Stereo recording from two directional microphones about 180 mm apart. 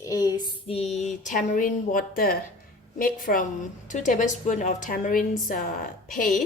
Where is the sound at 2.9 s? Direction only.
50° left (ahead or behind).